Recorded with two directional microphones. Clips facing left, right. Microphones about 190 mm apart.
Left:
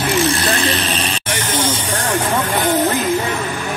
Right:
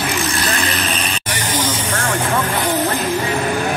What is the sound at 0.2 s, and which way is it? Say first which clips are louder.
Vehicle: left 4 dB; 35° left (ahead or behind).